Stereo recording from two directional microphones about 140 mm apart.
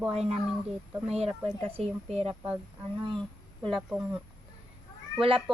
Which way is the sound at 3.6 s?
Centre (ahead or behind).